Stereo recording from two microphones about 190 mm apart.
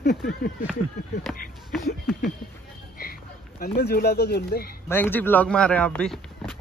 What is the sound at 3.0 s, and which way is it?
Speech, 50° left (ahead or behind).